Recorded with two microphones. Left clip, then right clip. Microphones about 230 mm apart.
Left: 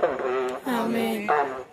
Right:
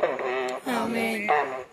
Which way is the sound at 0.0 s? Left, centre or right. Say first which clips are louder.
Left 2 dB; left.